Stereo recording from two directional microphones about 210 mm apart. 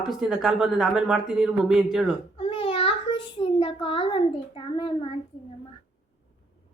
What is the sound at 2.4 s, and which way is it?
Child singing, 25° left (ahead or behind).